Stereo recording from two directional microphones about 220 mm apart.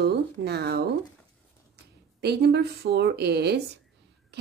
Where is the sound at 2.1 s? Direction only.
50° right (ahead or behind).